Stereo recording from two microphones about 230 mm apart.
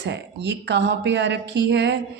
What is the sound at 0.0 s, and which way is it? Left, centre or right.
A woman's voice, right.